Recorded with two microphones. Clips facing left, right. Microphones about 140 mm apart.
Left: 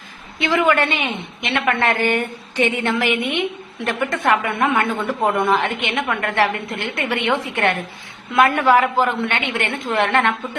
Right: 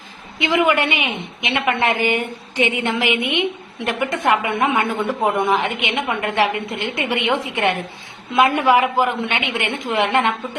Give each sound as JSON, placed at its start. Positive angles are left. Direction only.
{"t": 0.3, "sound": "a woman's voice", "side_deg": -15}